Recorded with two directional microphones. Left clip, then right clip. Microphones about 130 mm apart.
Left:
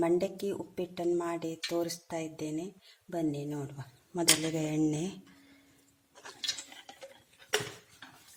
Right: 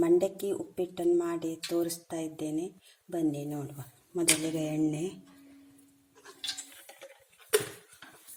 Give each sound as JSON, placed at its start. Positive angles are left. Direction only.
{"t": 0.0, "sound": "speech", "side_deg": 30}
{"t": 4.1, "sound": "speech", "side_deg": 45}